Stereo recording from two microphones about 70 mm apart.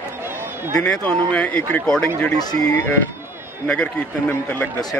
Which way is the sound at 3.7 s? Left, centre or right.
Centre.